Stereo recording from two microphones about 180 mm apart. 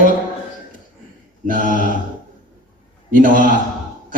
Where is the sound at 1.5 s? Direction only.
45° right (ahead or behind).